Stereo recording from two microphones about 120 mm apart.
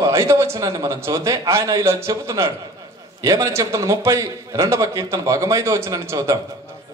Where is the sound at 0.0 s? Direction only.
25° right (ahead or behind).